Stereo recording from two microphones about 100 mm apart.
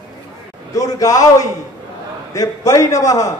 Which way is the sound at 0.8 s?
35° left (ahead or behind).